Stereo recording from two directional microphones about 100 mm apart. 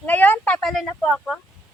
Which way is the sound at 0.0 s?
15° left (ahead or behind).